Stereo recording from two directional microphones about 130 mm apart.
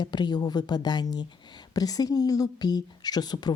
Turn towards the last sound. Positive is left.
turn(degrees=30)  # may be behind; listen again after turning